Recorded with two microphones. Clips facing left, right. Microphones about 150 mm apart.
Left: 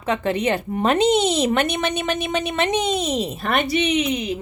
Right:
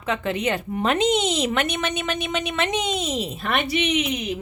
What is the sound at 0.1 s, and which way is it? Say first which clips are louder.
A woman's voice: left 3 dB; 35° left (ahead or behind).